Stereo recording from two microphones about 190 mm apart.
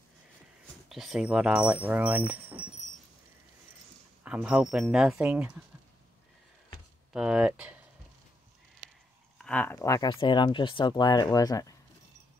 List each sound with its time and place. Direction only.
0.8 s speech: centre (ahead or behind)
4.2 s speech: 5° right (ahead or behind)
7.1 s speech: 5° right (ahead or behind)
9.4 s speech: 10° left (ahead or behind)